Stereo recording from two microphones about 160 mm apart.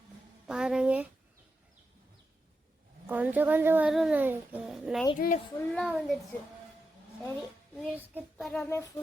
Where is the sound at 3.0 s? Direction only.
10° right (ahead or behind).